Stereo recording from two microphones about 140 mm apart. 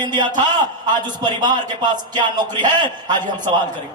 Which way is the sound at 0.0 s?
30° right (ahead or behind).